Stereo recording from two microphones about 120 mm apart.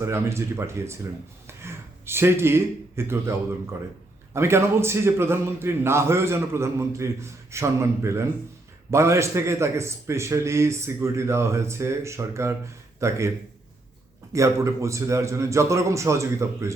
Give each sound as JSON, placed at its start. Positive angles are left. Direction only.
{"t": 0.0, "sound": "a man's voice", "side_deg": -20}
{"t": 4.4, "sound": "a man's voice", "side_deg": -20}
{"t": 14.3, "sound": "a man's voice", "side_deg": -25}